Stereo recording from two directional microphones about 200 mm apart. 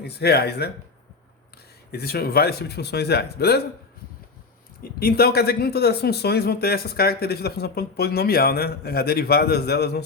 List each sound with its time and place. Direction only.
0.0 s speech: 55° left (ahead or behind)
1.9 s speech: 50° left (ahead or behind)
4.8 s speech: 50° left (ahead or behind)